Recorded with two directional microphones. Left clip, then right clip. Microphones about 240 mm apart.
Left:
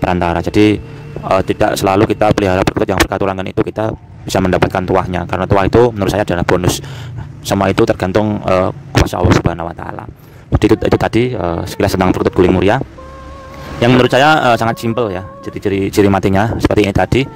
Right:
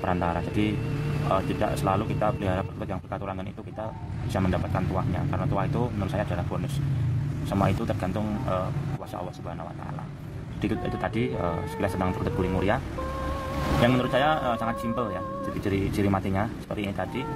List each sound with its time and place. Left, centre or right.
0.0 s speech: left
7.4 s speech: left
13.8 s speech: left